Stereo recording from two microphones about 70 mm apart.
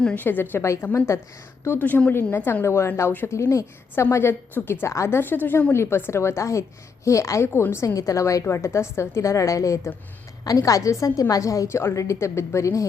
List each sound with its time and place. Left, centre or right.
0.2 s a woman's voice: left